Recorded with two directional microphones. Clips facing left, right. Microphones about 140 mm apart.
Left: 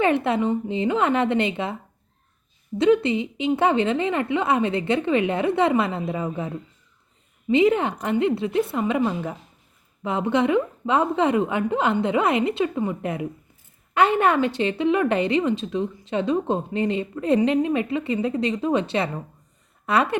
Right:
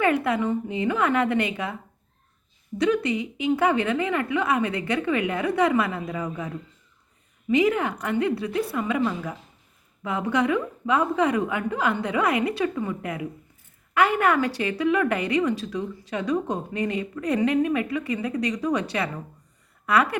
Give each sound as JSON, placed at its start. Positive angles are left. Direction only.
{"t": 0.0, "sound": "a woman's voice", "side_deg": 25}
{"t": 2.7, "sound": "a woman's voice", "side_deg": 25}